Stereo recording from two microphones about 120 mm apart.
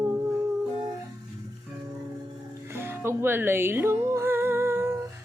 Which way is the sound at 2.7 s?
20° right (ahead or behind).